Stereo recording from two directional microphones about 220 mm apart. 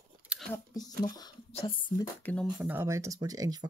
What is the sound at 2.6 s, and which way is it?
Speech, 10° right (ahead or behind).